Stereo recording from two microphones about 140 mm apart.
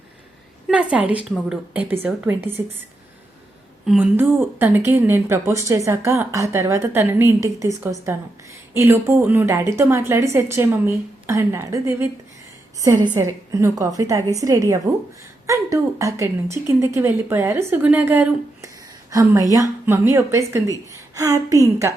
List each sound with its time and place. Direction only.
0.7 s speech: 10° right (ahead or behind)
3.8 s a woman's voice: 10° right (ahead or behind)
19.1 s a woman's voice: 25° right (ahead or behind)